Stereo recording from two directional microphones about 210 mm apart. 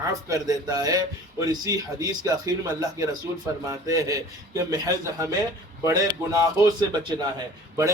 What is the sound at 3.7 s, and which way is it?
A man's voice, 15° right (ahead or behind).